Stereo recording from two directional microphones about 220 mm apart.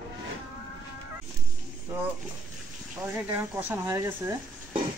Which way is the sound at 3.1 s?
10° right (ahead or behind).